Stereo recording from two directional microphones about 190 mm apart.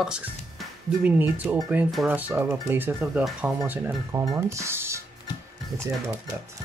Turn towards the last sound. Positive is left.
turn(degrees=-15)  # may be behind; listen again after turning